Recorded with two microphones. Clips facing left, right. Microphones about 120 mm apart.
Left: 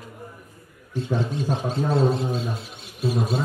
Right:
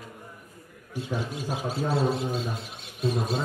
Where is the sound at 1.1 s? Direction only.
10° right (ahead or behind).